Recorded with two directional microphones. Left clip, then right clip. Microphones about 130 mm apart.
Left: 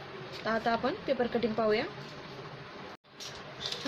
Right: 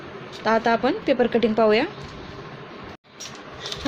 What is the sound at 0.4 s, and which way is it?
Speech, 75° right (ahead or behind).